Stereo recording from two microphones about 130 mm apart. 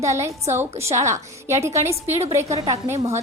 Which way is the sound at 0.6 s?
20° right (ahead or behind).